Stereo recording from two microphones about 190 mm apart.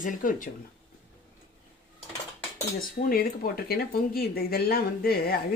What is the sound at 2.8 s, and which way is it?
Speech, 50° left (ahead or behind).